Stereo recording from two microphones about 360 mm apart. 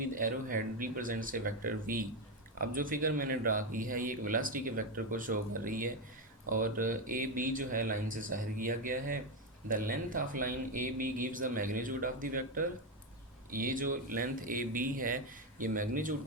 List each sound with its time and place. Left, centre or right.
0.0 s speech: right